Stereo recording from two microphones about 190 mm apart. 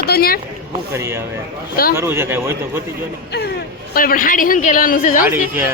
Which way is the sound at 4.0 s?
45° left (ahead or behind).